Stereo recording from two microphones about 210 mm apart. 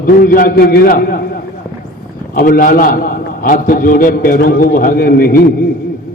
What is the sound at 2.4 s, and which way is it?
A man's voice, 40° left (ahead or behind).